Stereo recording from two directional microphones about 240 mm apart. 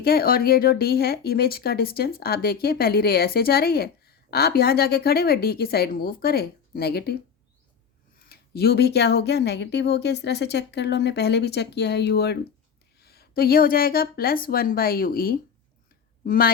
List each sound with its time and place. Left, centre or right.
0.0 s speech: left
8.2 s a woman's voice: left